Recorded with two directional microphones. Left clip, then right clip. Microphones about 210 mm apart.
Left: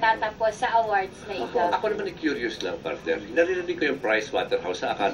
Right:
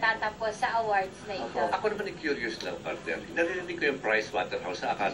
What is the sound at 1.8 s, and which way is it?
A man's voice, 25° left (ahead or behind).